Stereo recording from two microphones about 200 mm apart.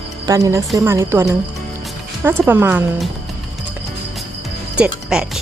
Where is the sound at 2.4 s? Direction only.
10° right (ahead or behind).